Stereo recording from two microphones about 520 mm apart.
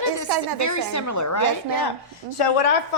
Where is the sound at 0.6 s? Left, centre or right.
Left.